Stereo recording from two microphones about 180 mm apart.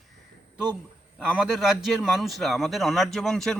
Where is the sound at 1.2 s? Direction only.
5° right (ahead or behind).